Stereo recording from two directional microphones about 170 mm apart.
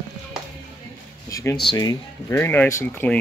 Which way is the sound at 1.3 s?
20° left (ahead or behind).